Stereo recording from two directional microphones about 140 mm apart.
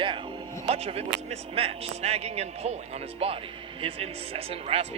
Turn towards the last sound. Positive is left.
turn(degrees=-45)  # may be behind; listen again after turning